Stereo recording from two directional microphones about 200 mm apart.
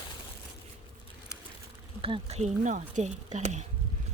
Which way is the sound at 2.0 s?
30° right (ahead or behind).